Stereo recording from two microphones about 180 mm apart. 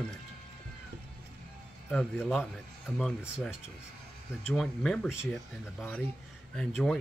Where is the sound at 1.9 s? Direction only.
5° left (ahead or behind).